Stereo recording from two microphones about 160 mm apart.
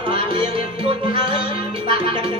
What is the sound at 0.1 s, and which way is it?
Music, 35° right (ahead or behind).